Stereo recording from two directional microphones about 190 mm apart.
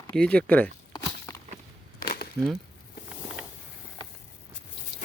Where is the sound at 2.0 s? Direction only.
50° left (ahead or behind).